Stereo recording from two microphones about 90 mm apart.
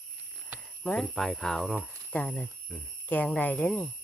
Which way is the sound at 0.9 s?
5° left (ahead or behind).